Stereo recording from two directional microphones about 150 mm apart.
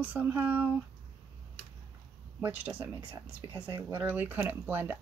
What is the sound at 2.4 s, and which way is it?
Speech, 10° right (ahead or behind).